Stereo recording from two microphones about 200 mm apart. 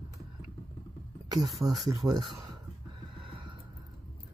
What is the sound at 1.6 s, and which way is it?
Speech, 15° right (ahead or behind).